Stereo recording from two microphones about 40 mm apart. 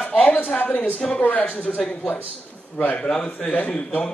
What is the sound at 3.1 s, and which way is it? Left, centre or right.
Speech, left.